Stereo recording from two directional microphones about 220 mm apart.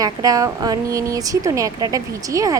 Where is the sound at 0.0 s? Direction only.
15° right (ahead or behind).